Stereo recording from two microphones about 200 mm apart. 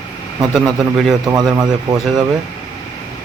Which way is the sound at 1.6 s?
20° right (ahead or behind).